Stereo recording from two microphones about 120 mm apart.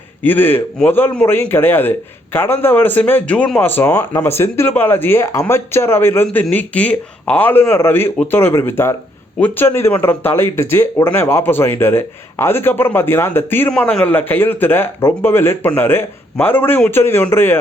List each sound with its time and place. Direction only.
0.2 s a man's voice: 15° left (ahead or behind)